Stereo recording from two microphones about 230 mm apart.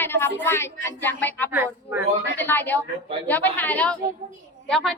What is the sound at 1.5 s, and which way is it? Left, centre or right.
Speech, centre.